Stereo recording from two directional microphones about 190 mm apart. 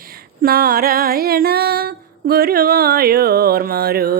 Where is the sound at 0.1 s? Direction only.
50° right (ahead or behind).